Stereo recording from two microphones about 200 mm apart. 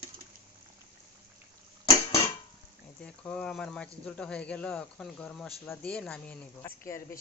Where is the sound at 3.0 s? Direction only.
5° left (ahead or behind).